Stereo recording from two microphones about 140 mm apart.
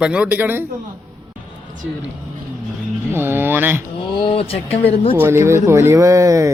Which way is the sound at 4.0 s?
35° left (ahead or behind).